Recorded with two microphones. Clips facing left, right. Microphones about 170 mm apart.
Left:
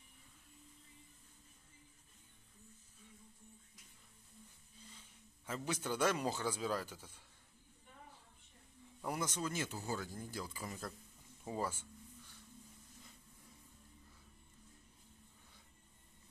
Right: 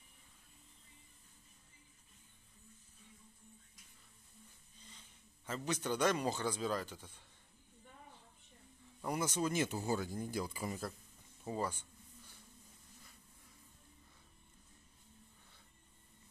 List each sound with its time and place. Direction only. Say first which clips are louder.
5.5 s speech: right 2 dB; 5° left (ahead or behind)
9.0 s speech: right 2 dB; centre (ahead or behind)
9.3 s speech: right 5 dB; 15° right (ahead or behind)
11.4 s speech: right 1 dB; 5° left (ahead or behind)